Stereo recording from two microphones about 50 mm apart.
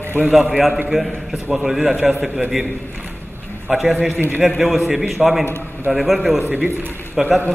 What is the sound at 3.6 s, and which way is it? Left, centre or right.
A man's voice, centre.